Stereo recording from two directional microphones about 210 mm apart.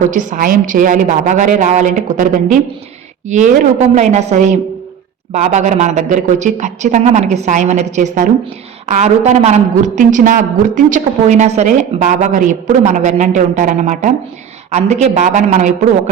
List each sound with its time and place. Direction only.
0.1 s a woman's voice: 40° right (ahead or behind)